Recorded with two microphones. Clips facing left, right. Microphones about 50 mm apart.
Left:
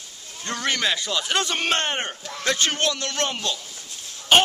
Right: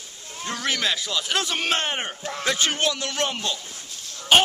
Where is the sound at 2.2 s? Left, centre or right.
Right.